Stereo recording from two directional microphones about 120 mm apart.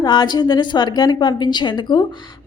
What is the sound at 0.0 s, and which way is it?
A woman's voice, 35° left (ahead or behind).